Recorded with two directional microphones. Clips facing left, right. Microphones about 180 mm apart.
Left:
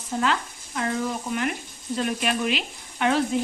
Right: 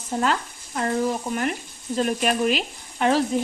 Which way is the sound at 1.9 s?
40° right (ahead or behind).